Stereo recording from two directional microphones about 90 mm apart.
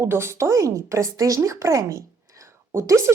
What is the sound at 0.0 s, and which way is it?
A woman's voice, 30° right (ahead or behind).